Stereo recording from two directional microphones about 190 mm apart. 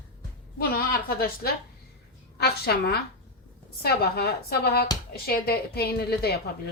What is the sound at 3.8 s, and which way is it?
Speech, 55° left (ahead or behind).